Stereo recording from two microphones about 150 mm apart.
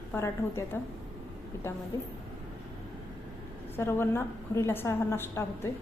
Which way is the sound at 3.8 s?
15° left (ahead or behind).